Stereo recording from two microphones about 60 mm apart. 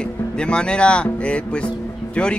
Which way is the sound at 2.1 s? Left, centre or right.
Centre.